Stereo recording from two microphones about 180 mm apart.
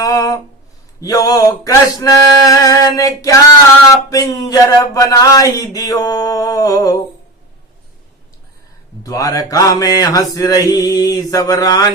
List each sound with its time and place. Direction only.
0.0 s a sound: 20° left (ahead or behind)
1.0 s mantra: 20° left (ahead or behind)
9.0 s mantra: 20° left (ahead or behind)